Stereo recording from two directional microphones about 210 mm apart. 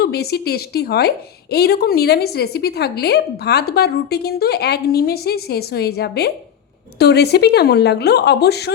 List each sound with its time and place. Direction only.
0.0 s a woman's voice: 50° left (ahead or behind)